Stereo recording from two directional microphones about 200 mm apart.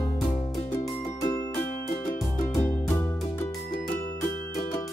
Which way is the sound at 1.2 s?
15° left (ahead or behind).